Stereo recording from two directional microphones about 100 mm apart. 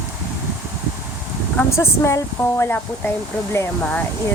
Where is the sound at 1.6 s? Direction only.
25° left (ahead or behind).